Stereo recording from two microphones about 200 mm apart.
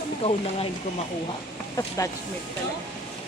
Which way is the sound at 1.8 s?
15° left (ahead or behind).